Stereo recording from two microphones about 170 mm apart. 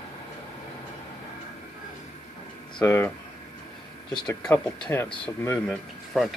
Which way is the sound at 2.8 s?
15° left (ahead or behind).